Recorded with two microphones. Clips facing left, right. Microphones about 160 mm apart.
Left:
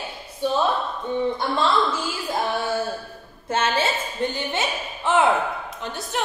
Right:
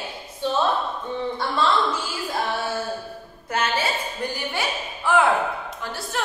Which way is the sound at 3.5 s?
25° left (ahead or behind).